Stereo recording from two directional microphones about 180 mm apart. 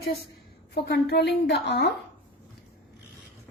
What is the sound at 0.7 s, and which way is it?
A woman's voice, 65° left (ahead or behind).